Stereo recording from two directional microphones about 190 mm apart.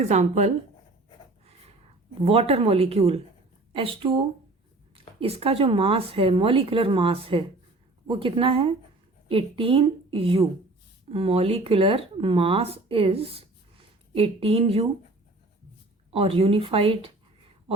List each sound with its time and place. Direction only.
0.0 s speech: 35° right (ahead or behind)
2.2 s speech: 30° right (ahead or behind)
16.1 s speech: 30° right (ahead or behind)